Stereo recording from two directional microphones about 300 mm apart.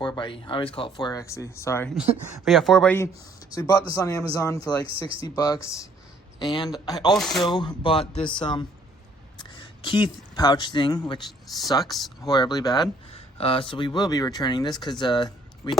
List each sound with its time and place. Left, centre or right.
0.0 s speech: centre
4.9 s speech: centre
5.2 s speech: centre
7.2 s speech: centre
7.4 s speech: centre